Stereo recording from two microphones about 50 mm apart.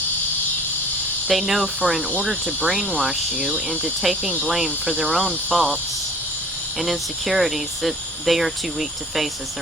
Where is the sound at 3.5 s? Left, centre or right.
Right.